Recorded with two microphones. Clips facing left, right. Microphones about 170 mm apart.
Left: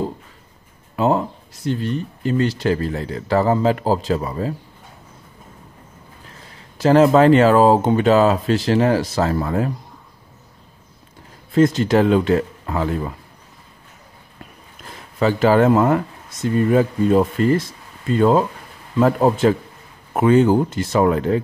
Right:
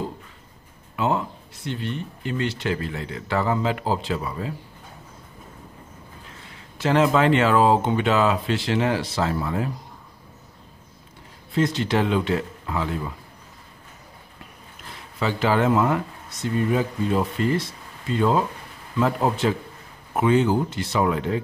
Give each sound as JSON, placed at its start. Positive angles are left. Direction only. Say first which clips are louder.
{"t": 0.9, "sound": "speech", "louder": "left 6 dB", "side_deg": 35}
{"t": 6.8, "sound": "speech", "louder": "left 7 dB", "side_deg": 40}
{"t": 11.5, "sound": "speech", "louder": "left 7 dB", "side_deg": 45}
{"t": 15.1, "sound": "speech", "louder": "left 7 dB", "side_deg": 45}